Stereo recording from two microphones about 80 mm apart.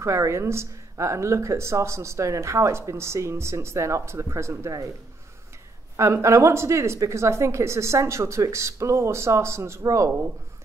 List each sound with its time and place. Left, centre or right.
0.0 s speech: right
5.9 s speech: right